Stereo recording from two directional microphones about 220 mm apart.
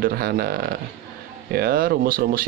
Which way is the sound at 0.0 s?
45° right (ahead or behind).